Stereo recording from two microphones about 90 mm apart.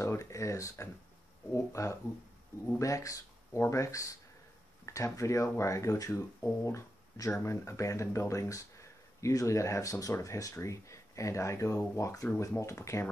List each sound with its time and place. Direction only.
0.0 s speech: 30° left (ahead or behind)